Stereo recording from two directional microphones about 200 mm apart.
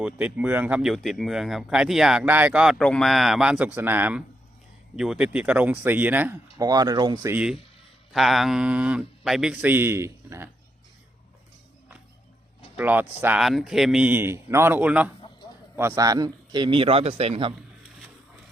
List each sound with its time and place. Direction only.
0.0 s a man's voice: 5° right (ahead or behind)
12.7 s a man's voice: 10° right (ahead or behind); by 17.5 s 30° right (ahead or behind)